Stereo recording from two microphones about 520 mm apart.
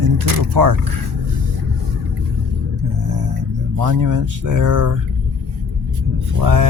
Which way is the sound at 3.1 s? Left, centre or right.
Right.